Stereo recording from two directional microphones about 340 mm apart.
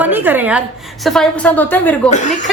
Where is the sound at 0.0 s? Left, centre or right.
Centre.